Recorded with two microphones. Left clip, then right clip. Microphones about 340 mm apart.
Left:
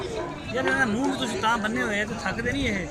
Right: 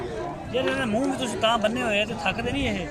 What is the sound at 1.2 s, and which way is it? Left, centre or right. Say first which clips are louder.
Speech: right 3 dB; centre.